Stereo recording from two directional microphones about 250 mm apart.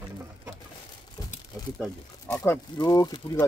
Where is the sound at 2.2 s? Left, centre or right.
Centre.